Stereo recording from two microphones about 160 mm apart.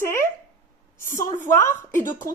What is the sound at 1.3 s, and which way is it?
Speech, 15° left (ahead or behind).